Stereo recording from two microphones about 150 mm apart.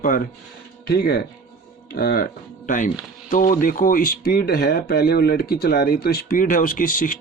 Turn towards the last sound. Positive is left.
turn(degrees=65)  # may be behind; listen again after turning